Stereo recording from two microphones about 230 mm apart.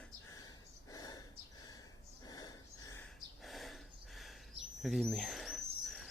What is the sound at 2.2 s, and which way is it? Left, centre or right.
Gasp, centre.